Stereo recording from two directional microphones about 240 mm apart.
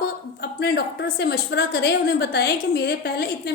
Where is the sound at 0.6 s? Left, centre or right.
Left.